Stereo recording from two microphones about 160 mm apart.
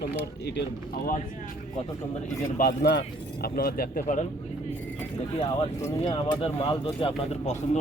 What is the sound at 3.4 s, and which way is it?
Speech, 70° left (ahead or behind).